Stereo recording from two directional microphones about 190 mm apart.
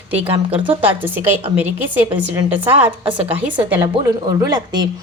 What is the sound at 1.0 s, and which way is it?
Speech, 10° right (ahead or behind).